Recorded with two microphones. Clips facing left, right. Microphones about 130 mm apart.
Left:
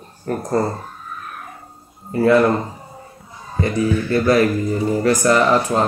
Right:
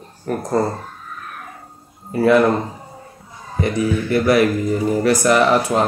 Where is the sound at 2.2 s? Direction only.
15° right (ahead or behind).